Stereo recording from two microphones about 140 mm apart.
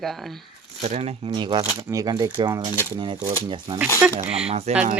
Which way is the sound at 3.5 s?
35° right (ahead or behind).